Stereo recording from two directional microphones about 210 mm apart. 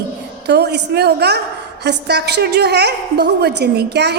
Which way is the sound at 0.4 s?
50° right (ahead or behind).